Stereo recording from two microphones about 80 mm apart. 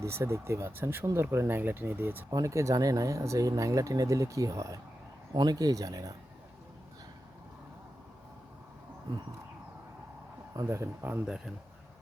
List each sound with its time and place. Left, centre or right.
0.0 s speech: right
2.3 s speech: right
5.3 s speech: right
10.5 s speech: right
11.3 s speech: centre